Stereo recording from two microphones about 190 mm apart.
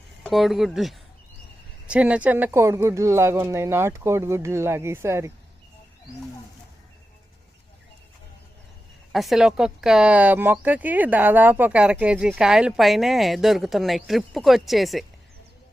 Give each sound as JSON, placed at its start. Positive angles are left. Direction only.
{"t": 0.2, "sound": "speech", "side_deg": 0}
{"t": 9.1, "sound": "speech", "side_deg": 0}